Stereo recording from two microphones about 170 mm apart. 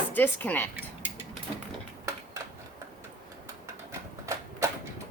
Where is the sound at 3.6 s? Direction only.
15° right (ahead or behind).